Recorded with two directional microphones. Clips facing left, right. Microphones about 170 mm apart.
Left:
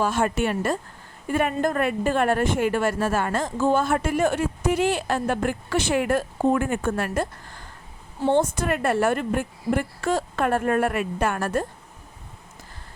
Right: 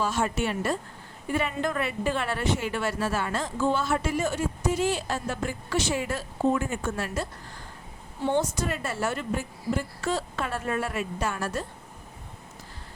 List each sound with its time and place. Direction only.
0.0 s speech: 55° left (ahead or behind)